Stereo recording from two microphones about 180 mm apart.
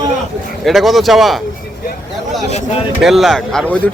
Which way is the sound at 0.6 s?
Centre (ahead or behind).